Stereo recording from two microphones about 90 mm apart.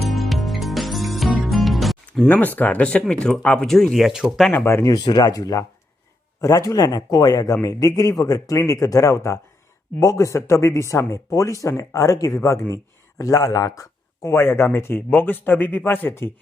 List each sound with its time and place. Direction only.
0.0 s music: centre (ahead or behind)
2.2 s speech: 20° left (ahead or behind); by 4.4 s 5° right (ahead or behind)
4.5 s speech: 25° left (ahead or behind)
4.9 s speech: 50° left (ahead or behind)
5.3 s a man's voice: 40° left (ahead or behind)